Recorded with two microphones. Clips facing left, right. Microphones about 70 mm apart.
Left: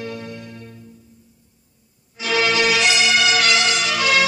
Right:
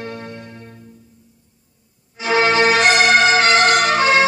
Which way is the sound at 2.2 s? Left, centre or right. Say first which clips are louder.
Right 4 dB; right.